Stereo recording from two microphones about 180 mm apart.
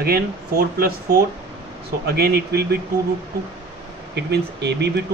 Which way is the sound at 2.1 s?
60° right (ahead or behind).